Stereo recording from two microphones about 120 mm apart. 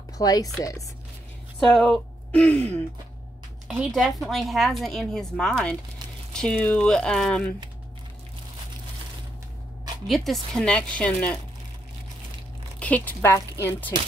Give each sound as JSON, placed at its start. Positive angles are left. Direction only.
{"t": 0.2, "sound": "speech", "side_deg": 30}
{"t": 1.6, "sound": "a woman's voice", "side_deg": 0}
{"t": 3.6, "sound": "speech", "side_deg": 0}
{"t": 10.0, "sound": "speech", "side_deg": 0}
{"t": 12.7, "sound": "a woman's voice", "side_deg": 10}